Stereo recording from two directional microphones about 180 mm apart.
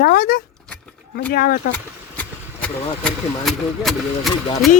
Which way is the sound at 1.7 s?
5° left (ahead or behind).